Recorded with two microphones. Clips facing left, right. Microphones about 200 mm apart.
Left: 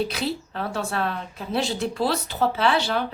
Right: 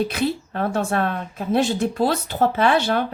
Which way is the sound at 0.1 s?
50° right (ahead or behind).